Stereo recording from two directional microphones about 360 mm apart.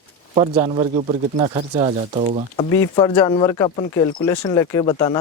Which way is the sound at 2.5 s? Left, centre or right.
Centre.